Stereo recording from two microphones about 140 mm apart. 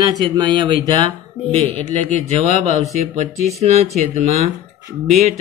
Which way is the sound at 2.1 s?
55° right (ahead or behind).